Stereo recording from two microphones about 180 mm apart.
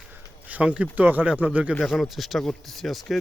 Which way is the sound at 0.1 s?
10° right (ahead or behind).